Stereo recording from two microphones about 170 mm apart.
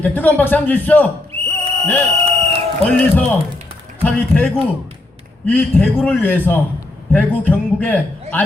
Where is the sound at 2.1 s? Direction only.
35° right (ahead or behind).